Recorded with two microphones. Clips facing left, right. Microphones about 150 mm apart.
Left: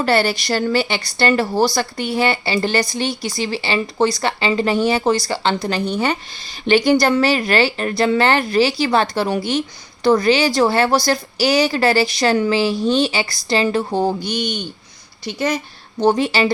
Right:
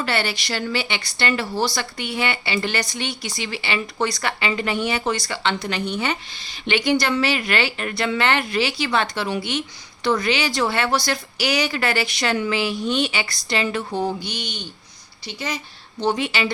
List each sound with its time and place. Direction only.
0.0 s a woman's voice: 40° left (ahead or behind)